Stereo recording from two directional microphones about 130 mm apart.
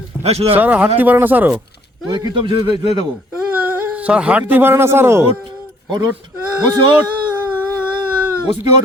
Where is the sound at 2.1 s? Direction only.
35° right (ahead or behind).